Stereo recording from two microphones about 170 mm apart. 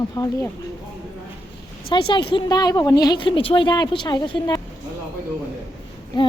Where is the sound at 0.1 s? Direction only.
20° left (ahead or behind).